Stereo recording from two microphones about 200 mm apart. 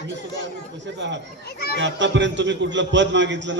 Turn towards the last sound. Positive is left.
turn(degrees=-65)  # may be behind; listen again after turning